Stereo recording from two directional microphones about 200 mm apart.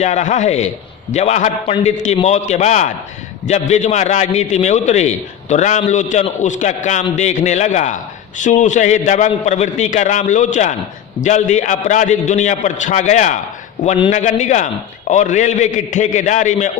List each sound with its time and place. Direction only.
0.0 s a man's voice: 35° left (ahead or behind)